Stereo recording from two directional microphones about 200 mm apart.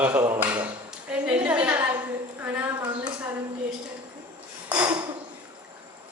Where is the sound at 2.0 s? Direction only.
10° right (ahead or behind).